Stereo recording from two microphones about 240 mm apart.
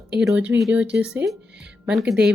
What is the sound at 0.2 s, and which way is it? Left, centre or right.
Speech, centre.